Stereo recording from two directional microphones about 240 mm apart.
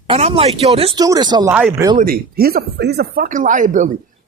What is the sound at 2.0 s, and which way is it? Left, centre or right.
Speech, right.